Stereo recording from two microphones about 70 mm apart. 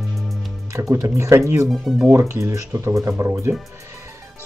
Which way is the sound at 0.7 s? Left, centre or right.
Right.